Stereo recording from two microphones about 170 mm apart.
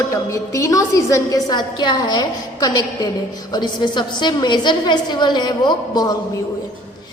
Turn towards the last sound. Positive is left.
turn(degrees=25)  # may be behind; listen again after turning